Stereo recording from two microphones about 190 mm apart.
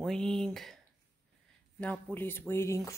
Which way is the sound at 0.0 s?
Centre (ahead or behind).